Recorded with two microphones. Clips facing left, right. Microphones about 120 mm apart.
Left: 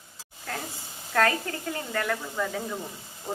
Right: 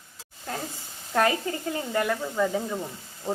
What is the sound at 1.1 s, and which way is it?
A woman's voice, 20° right (ahead or behind).